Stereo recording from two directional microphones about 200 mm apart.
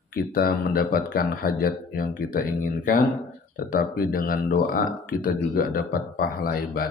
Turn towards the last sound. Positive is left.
turn(degrees=50)  # may be behind; listen again after turning